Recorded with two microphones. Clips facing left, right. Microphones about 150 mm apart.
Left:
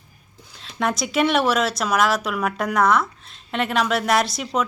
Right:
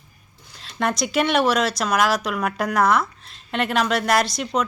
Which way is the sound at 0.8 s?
Centre (ahead or behind).